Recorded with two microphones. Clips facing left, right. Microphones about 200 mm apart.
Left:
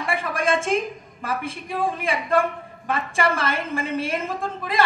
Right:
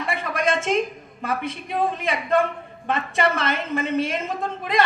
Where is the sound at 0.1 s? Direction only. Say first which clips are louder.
Left 1 dB; 30° left (ahead or behind).